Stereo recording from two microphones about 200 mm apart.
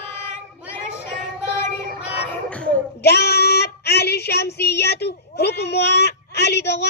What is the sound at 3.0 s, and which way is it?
Child singing, 55° left (ahead or behind).